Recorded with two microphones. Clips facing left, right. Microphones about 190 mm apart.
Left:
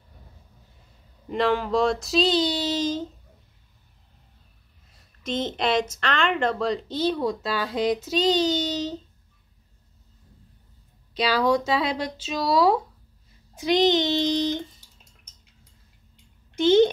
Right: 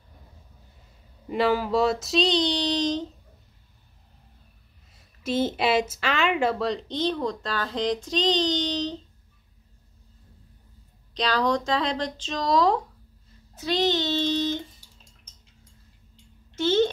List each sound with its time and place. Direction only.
1.3 s a woman's voice: 5° right (ahead or behind)
5.2 s a woman's voice: 5° right (ahead or behind)
11.1 s speech: 5° left (ahead or behind)
16.5 s speech: 15° left (ahead or behind)